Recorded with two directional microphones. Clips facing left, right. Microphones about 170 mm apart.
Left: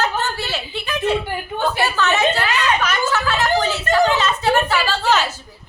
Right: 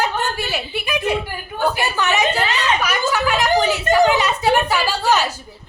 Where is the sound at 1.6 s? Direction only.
15° right (ahead or behind).